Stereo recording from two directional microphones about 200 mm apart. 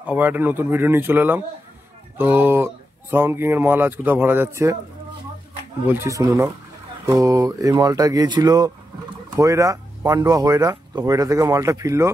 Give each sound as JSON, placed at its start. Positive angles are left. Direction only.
{"t": 0.0, "sound": "speech", "side_deg": -10}
{"t": 5.9, "sound": "speech", "side_deg": -15}